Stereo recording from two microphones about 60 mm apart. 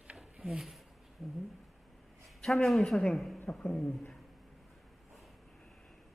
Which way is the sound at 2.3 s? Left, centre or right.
Centre.